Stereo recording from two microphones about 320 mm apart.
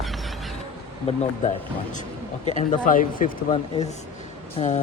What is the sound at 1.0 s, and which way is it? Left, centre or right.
Speech, left.